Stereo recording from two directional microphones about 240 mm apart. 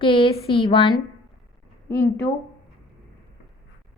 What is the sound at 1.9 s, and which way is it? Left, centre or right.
Speech, centre.